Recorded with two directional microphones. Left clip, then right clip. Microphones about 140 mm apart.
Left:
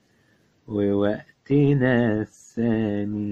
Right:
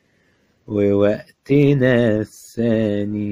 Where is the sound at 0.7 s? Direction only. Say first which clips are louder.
Right 6 dB; 25° right (ahead or behind).